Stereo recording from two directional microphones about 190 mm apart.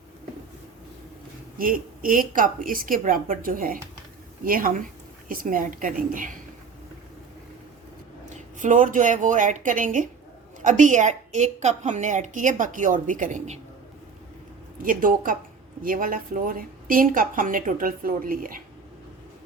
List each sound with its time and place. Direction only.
1.5 s a woman's voice: 50° right (ahead or behind)
8.3 s a woman's voice: 45° right (ahead or behind)
14.8 s a woman's voice: 45° right (ahead or behind)